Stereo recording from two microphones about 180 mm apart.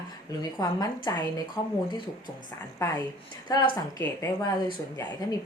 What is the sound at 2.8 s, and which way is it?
Speech, 20° left (ahead or behind).